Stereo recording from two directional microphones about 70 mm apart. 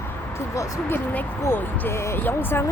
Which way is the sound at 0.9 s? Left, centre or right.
Left.